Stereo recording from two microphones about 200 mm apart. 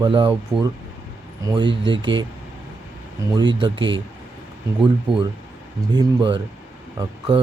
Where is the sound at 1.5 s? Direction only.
25° right (ahead or behind).